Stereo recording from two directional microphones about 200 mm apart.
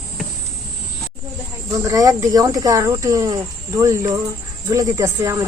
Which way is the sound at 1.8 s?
15° right (ahead or behind).